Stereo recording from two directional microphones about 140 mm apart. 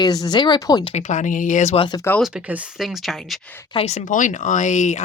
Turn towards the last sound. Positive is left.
turn(degrees=60)  # may be behind; listen again after turning